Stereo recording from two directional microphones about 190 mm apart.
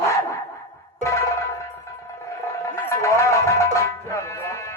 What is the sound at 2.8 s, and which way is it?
Music, 15° left (ahead or behind).